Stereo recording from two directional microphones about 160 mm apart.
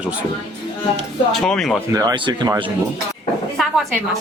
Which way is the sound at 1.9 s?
25° right (ahead or behind).